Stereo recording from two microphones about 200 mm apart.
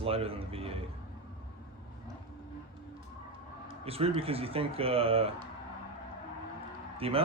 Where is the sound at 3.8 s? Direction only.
30° right (ahead or behind).